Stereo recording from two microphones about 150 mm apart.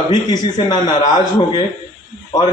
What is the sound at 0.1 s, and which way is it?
A man's voice, 30° left (ahead or behind).